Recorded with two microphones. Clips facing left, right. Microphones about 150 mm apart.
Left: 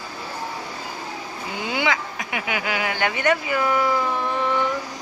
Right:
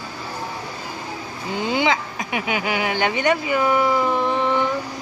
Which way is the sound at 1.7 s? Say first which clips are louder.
Right 3 dB; 25° right (ahead or behind).